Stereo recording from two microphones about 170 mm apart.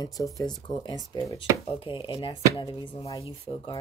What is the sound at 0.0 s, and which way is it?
Speech, 20° left (ahead or behind).